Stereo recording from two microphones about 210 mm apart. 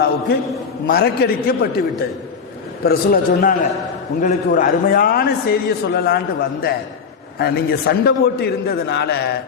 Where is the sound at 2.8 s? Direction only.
45° left (ahead or behind).